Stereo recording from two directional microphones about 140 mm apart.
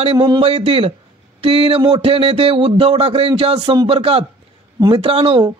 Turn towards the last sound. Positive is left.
turn(degrees=-40)  # may be behind; listen again after turning